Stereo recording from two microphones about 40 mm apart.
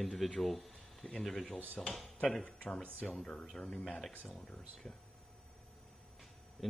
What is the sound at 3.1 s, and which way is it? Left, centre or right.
Speech, centre.